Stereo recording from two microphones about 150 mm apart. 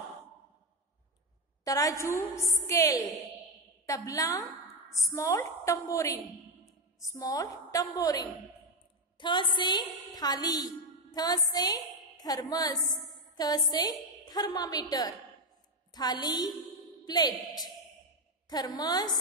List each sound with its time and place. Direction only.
1.6 s a woman's voice: 20° left (ahead or behind)
4.8 s a sound: centre (ahead or behind)
5.1 s a woman's voice: 20° left (ahead or behind)
12.7 s a woman's voice: centre (ahead or behind)
13.4 s a woman's voice: 25° left (ahead or behind)